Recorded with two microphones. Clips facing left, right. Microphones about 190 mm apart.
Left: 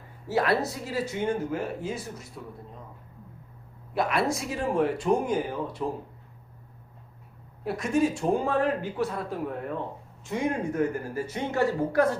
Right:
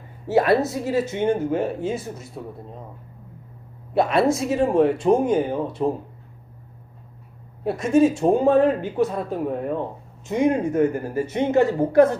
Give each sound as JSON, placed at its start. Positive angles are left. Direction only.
{"t": 0.3, "sound": "speech", "side_deg": -25}
{"t": 3.9, "sound": "speech", "side_deg": -25}
{"t": 7.6, "sound": "speech", "side_deg": -25}